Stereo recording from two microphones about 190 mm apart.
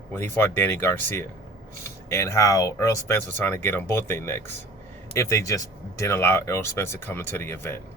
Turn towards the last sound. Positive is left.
turn(degrees=15)  # may be behind; listen again after turning